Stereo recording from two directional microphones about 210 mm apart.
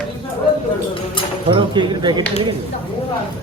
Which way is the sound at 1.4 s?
20° right (ahead or behind).